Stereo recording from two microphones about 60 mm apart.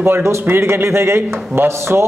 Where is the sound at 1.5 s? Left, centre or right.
Right.